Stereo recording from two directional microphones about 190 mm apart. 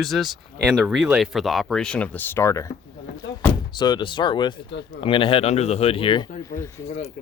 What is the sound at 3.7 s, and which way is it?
Speech, 20° left (ahead or behind).